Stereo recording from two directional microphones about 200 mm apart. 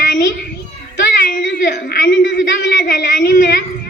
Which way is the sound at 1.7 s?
55° left (ahead or behind).